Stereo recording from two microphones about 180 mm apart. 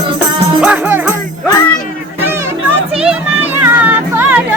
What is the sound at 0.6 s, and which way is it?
Music, 10° right (ahead or behind).